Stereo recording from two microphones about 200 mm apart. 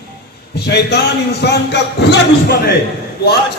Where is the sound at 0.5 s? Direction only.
55° left (ahead or behind).